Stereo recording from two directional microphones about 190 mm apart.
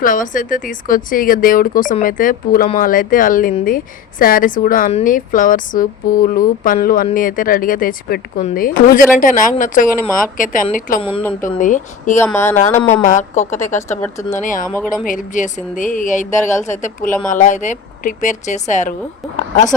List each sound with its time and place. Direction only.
0.0 s speech: 45° left (ahead or behind)
11.2 s speech: 10° left (ahead or behind)
11.4 s speech: 40° left (ahead or behind)
12.2 s speech: 15° left (ahead or behind)
12.9 s speech: 40° left (ahead or behind)
14.0 s speech: 15° left (ahead or behind)
14.3 s speech: 45° left (ahead or behind)